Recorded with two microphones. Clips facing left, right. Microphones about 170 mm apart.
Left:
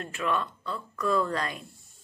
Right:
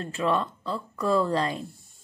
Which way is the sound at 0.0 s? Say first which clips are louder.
Right 4 dB; 30° right (ahead or behind).